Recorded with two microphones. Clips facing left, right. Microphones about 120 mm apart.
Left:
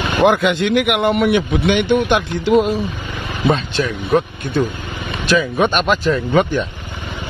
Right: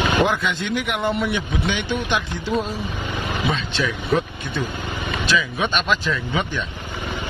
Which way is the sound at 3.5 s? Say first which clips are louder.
Left 9 dB; 45° left (ahead or behind).